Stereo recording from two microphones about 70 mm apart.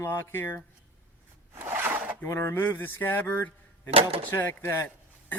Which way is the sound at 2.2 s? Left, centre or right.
Left.